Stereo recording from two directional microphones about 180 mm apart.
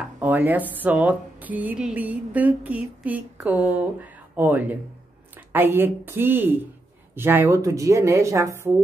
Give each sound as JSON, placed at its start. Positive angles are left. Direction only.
{"t": 0.2, "sound": "a woman's voice", "side_deg": -10}